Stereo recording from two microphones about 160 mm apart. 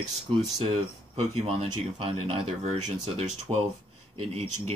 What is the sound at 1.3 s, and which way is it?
Speech, 40° right (ahead or behind).